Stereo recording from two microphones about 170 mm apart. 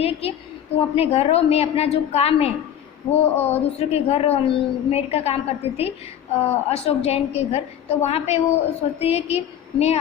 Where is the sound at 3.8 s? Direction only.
35° left (ahead or behind).